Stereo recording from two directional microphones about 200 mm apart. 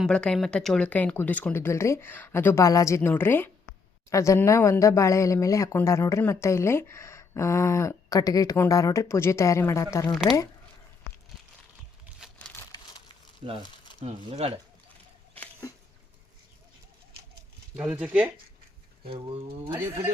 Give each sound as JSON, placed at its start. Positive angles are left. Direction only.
{"t": 0.0, "sound": "speech", "side_deg": 5}
{"t": 13.4, "sound": "speech", "side_deg": -30}
{"t": 17.7, "sound": "speech", "side_deg": -5}
{"t": 19.0, "sound": "speech", "side_deg": -30}